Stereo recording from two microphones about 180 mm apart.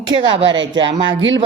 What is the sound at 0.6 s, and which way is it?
Speech, 90° right.